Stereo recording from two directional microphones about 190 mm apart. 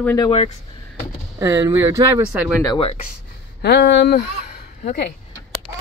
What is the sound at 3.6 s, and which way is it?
Speech, 65° left (ahead or behind).